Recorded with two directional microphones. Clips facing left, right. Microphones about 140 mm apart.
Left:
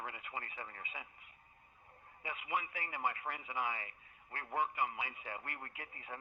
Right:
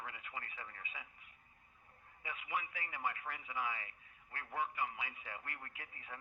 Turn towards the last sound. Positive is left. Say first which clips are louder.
# left 4 dB
turn(degrees=35)  # may be behind; listen again after turning